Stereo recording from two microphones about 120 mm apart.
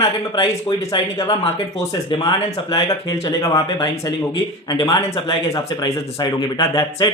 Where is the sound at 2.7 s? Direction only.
30° left (ahead or behind).